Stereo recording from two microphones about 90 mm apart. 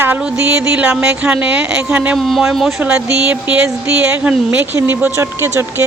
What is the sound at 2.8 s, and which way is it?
Speech, 15° right (ahead or behind).